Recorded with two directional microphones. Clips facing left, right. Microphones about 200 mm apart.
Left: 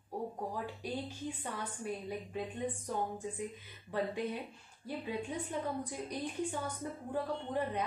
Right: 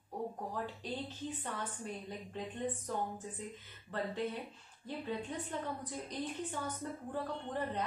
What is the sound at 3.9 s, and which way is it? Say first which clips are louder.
A woman's voice: left 2 dB; 10° left (ahead or behind).